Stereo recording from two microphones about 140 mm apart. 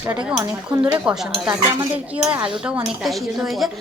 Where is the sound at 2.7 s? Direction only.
5° right (ahead or behind).